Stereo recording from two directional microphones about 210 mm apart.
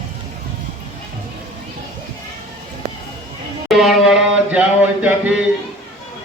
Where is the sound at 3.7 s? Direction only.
Centre (ahead or behind).